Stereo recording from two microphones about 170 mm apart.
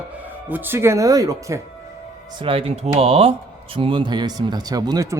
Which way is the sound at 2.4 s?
30° right (ahead or behind).